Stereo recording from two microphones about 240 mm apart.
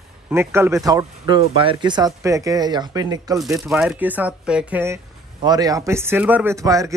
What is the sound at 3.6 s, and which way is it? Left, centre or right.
Speech, centre.